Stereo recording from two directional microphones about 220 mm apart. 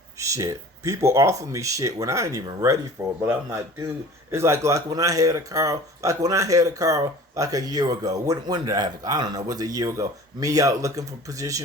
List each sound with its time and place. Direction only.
0.2 s speech: 15° right (ahead or behind)